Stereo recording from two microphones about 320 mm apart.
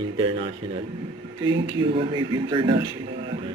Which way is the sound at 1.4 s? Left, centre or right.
Centre.